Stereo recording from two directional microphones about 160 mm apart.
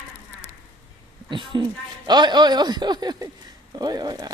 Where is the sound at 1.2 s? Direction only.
30° right (ahead or behind).